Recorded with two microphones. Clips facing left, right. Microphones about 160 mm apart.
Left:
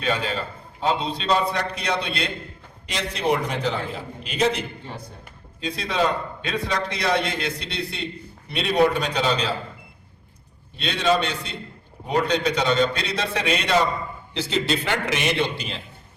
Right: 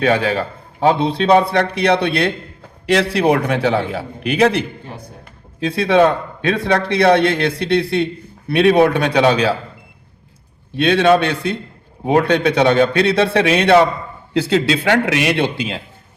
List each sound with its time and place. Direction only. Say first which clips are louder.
0.0 s a man's voice: right 9 dB; 70° right (ahead or behind)
5.6 s a man's voice: right 10 dB; 65° right (ahead or behind)
10.8 s a man's voice: right 9 dB; 65° right (ahead or behind)